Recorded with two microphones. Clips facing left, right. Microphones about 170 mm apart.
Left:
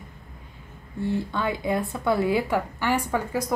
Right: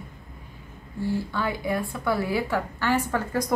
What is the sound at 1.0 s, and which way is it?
A woman's voice, 20° left (ahead or behind).